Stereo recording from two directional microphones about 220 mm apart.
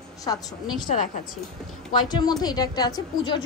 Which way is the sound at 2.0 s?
20° left (ahead or behind).